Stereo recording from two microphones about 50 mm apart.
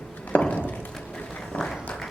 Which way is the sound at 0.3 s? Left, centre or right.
Left.